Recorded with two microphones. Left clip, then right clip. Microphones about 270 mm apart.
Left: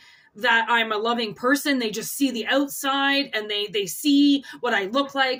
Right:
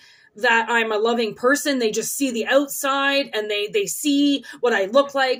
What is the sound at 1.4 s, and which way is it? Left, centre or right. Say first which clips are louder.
Speech: right 2 dB; left.